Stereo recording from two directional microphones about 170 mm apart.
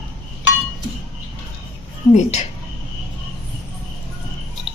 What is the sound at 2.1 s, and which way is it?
Speech, 40° left (ahead or behind).